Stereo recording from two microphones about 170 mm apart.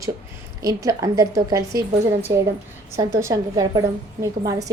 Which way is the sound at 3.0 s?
20° right (ahead or behind).